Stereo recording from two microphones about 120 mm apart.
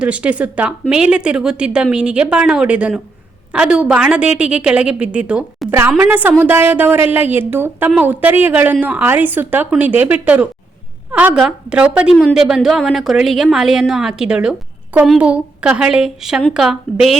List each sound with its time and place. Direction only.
0.0 s a woman's voice: 10° right (ahead or behind)